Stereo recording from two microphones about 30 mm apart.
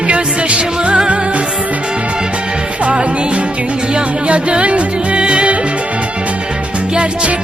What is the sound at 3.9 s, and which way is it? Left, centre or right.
Music, right.